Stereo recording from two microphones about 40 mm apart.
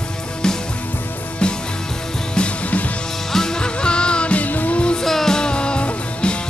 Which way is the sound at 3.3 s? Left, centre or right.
Centre.